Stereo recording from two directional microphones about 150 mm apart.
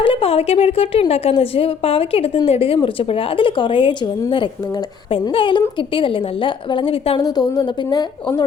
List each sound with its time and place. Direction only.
0.0 s a woman's voice: 40° left (ahead or behind)
7.2 s a woman's voice: 25° left (ahead or behind)